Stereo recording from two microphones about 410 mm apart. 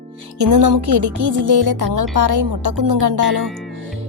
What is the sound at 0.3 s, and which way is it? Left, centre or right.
Speech, right.